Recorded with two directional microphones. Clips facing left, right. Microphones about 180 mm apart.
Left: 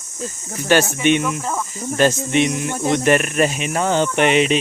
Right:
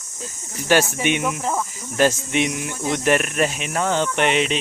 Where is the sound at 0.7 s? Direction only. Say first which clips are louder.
Left 3 dB; 5° right (ahead or behind).